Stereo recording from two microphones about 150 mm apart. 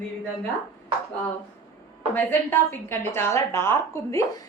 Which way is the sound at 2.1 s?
15° left (ahead or behind).